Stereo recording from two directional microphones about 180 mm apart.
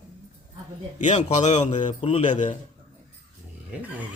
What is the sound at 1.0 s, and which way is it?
A man's voice, 40° left (ahead or behind).